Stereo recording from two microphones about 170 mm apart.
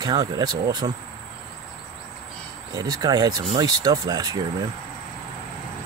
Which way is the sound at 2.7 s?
20° right (ahead or behind).